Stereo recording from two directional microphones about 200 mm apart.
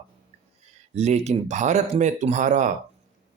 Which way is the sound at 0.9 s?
35° right (ahead or behind).